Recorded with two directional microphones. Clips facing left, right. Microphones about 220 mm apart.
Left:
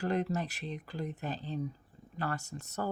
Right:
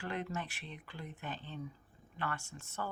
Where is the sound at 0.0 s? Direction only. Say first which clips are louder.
Left 8 dB; 40° left (ahead or behind).